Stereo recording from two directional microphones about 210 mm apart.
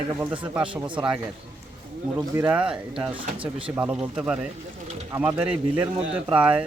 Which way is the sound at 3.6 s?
5° right (ahead or behind).